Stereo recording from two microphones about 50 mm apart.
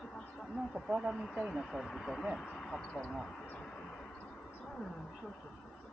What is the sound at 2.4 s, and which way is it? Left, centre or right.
Speech, centre.